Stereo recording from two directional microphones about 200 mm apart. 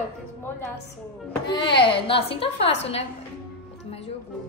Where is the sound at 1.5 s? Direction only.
25° left (ahead or behind).